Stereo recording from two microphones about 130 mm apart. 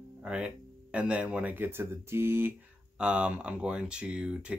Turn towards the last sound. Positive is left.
turn(degrees=-10)  # may be behind; listen again after turning